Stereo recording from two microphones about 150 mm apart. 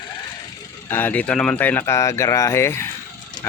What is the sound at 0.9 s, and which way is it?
Speech, 15° left (ahead or behind).